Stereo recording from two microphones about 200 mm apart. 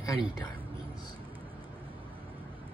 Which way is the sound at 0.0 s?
20° left (ahead or behind).